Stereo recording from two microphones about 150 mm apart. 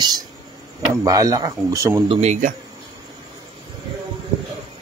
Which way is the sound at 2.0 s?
45° right (ahead or behind).